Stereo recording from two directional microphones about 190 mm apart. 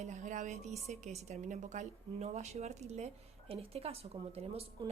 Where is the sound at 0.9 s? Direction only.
40° right (ahead or behind).